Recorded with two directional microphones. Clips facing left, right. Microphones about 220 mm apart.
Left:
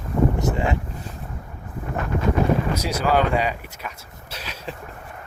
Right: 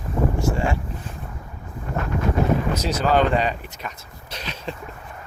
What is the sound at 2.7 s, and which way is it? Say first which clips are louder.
Speech: right 1 dB; 10° left (ahead or behind).